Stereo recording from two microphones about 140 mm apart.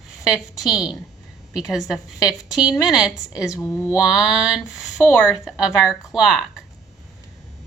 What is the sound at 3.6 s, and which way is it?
Speech, 20° left (ahead or behind).